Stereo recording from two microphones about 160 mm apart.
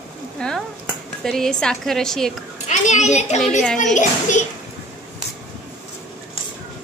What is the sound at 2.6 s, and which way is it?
Speech, 45° left (ahead or behind).